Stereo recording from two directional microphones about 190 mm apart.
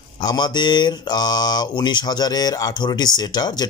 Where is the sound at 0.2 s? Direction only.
20° left (ahead or behind).